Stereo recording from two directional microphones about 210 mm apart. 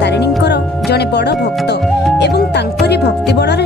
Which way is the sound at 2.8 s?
50° left (ahead or behind).